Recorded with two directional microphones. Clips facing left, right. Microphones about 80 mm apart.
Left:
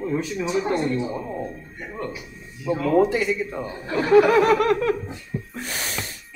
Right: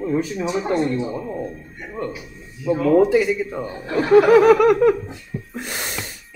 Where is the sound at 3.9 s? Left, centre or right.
Centre.